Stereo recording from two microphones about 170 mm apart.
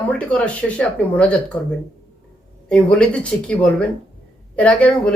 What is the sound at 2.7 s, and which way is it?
Speech, 5° left (ahead or behind).